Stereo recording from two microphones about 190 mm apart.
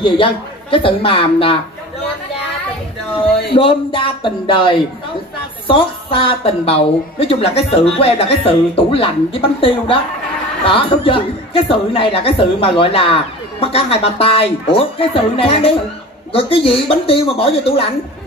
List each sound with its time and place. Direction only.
0.0 s a woman's voice: 30° left (ahead or behind)
3.5 s a woman's voice: 30° left (ahead or behind)